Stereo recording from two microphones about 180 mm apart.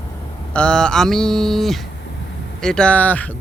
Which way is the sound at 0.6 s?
5° left (ahead or behind).